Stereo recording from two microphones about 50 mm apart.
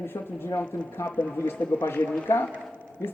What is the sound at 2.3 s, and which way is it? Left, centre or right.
Speech, left.